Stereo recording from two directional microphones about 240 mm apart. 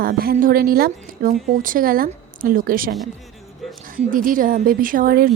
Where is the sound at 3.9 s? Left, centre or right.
Right.